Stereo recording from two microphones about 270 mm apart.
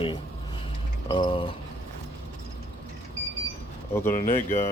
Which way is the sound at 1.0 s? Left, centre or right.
Centre.